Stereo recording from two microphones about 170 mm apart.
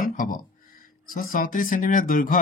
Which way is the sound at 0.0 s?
50° left (ahead or behind).